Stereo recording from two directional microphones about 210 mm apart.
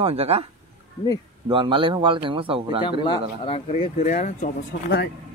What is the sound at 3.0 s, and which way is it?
Speech, 25° left (ahead or behind).